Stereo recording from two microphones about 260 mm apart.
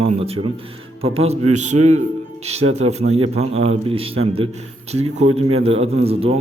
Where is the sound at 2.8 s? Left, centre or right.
Right.